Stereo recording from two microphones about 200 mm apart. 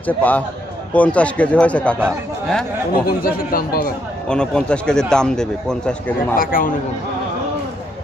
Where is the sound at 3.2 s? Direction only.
45° left (ahead or behind).